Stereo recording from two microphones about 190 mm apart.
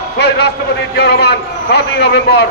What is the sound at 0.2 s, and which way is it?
A man's voice, 60° left (ahead or behind).